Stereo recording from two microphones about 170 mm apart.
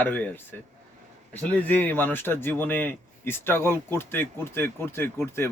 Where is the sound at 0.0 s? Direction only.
10° left (ahead or behind).